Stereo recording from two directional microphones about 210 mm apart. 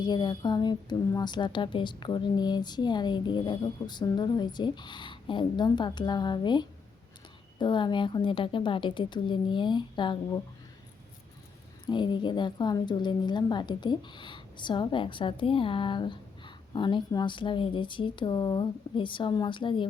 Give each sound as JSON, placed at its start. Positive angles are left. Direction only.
{"t": 0.0, "sound": "a woman's voice", "side_deg": 20}
{"t": 11.9, "sound": "a woman's voice", "side_deg": 20}